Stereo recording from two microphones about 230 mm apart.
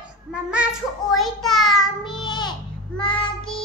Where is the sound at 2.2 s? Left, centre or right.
Centre.